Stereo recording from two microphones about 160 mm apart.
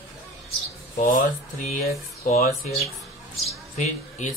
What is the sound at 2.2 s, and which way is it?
Speech, 50° left (ahead or behind).